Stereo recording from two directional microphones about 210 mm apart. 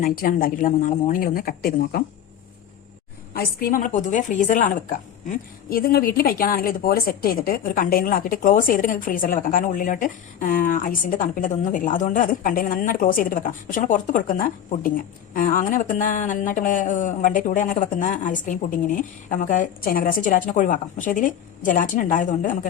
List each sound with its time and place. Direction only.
0.0 s speech: 40° left (ahead or behind)
3.3 s speech: 45° left (ahead or behind)